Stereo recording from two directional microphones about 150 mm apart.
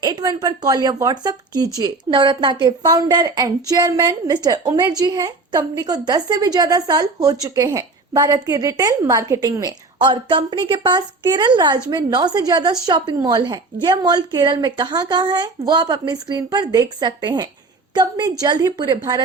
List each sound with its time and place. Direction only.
0.0 s a woman's voice: 25° right (ahead or behind)